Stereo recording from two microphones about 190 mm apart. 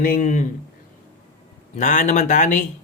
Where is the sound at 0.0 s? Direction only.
45° left (ahead or behind).